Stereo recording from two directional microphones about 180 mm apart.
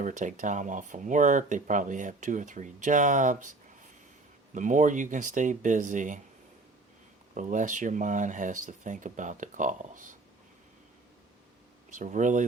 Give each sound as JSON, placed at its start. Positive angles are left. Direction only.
{"t": 0.0, "sound": "speech", "side_deg": -45}
{"t": 4.5, "sound": "speech", "side_deg": -45}
{"t": 7.3, "sound": "speech", "side_deg": -45}
{"t": 11.9, "sound": "speech", "side_deg": -45}